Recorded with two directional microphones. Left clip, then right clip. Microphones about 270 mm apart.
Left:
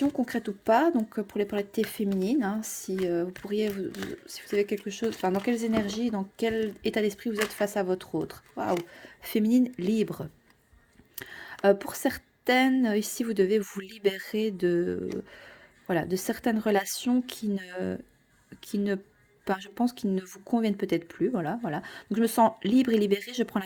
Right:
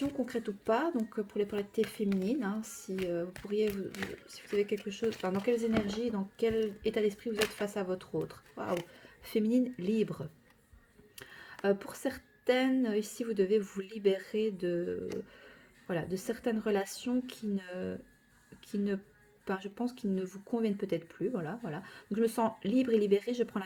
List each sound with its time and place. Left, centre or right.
0.3 s speech: left
11.2 s a sound: left
11.6 s speech: left